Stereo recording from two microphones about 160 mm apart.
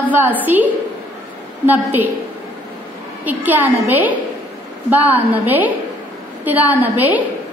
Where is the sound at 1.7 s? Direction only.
10° right (ahead or behind).